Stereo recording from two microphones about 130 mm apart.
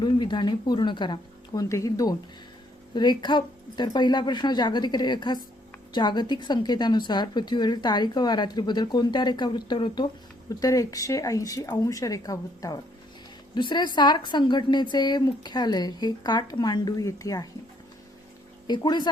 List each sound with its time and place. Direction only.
0.0 s a woman's voice: 35° left (ahead or behind)
1.7 s a woman's voice: 25° left (ahead or behind)
18.7 s a woman's voice: 35° left (ahead or behind)